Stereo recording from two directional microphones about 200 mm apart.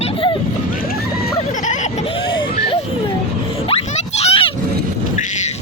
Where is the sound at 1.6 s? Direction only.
40° left (ahead or behind).